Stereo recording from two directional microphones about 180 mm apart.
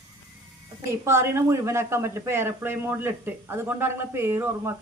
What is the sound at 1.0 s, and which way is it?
Speech, 15° right (ahead or behind).